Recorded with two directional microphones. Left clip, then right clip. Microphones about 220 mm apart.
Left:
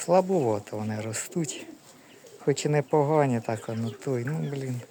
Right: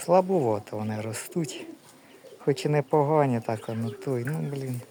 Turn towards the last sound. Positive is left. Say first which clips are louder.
# even
turn(degrees=0)  # may be behind; listen again after turning